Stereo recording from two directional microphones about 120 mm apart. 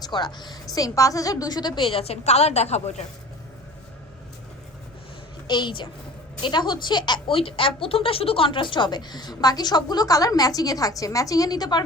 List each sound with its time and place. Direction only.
0.0 s a woman's voice: 35° left (ahead or behind); by 2.9 s 65° left (ahead or behind)
5.5 s a woman's voice: 40° left (ahead or behind)